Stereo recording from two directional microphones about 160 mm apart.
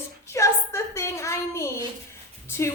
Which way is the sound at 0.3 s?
15° left (ahead or behind).